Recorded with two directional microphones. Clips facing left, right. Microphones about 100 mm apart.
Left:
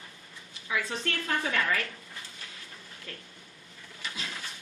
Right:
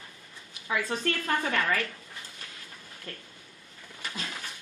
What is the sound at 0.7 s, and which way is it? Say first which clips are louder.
A woman's voice: right 3 dB; 40° right (ahead or behind).